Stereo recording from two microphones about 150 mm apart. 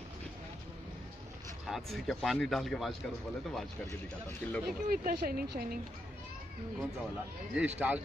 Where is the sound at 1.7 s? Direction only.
Centre (ahead or behind).